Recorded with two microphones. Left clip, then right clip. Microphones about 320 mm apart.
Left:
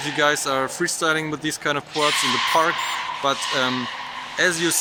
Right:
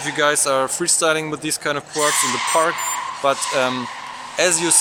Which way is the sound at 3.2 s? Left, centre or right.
Centre.